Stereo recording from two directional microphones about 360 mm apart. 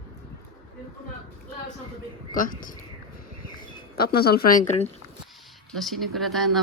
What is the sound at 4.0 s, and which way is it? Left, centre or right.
Speech, left.